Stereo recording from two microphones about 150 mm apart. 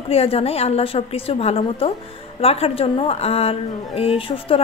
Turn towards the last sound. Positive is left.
turn(degrees=40)  # may be behind; listen again after turning